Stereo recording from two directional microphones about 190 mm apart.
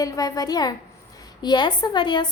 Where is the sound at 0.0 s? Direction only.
20° left (ahead or behind).